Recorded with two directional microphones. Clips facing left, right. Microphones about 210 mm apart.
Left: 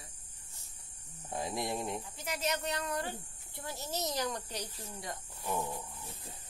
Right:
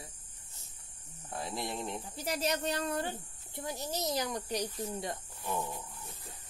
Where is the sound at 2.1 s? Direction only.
35° right (ahead or behind).